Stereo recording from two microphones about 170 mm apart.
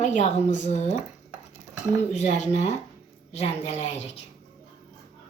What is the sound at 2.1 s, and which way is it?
A woman's voice, 45° left (ahead or behind).